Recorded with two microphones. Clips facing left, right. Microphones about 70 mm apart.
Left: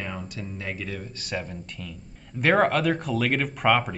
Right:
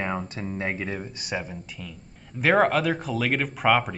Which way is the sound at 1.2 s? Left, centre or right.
Centre.